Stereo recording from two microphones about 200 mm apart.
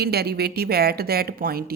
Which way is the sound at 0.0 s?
55° right (ahead or behind).